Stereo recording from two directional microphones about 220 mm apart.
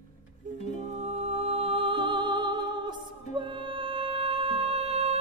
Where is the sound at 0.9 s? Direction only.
30° right (ahead or behind).